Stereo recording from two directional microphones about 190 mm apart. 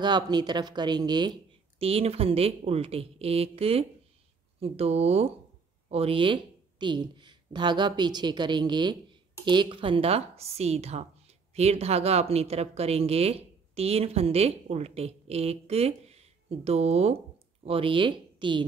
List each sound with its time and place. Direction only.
0.0 s a woman's voice: 20° right (ahead or behind)